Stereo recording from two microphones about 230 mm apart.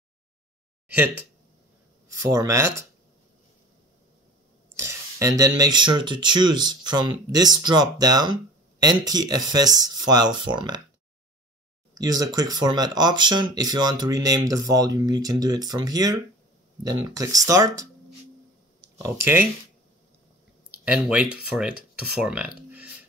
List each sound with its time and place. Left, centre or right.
2.0 s speech: centre
4.7 s a sound: centre
5.4 s speech: centre
11.9 s speech: centre
18.9 s speech: centre
20.8 s speech: centre